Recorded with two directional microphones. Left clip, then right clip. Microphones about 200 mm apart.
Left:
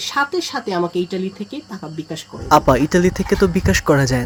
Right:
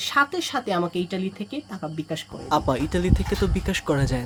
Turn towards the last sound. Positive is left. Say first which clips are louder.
# left 9 dB
turn(degrees=30)  # may be behind; listen again after turning